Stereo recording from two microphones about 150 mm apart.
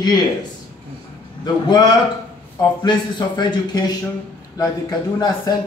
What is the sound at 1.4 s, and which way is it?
A man's voice, 25° left (ahead or behind).